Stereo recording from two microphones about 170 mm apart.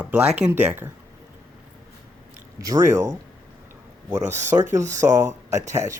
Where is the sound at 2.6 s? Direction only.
20° right (ahead or behind).